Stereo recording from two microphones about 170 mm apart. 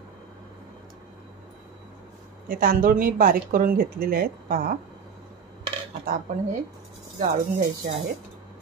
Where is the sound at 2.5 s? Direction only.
60° right (ahead or behind).